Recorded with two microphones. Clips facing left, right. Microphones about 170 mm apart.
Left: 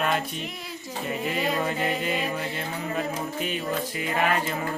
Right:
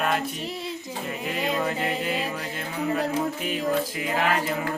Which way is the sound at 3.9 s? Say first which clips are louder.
Even; 5° right (ahead or behind).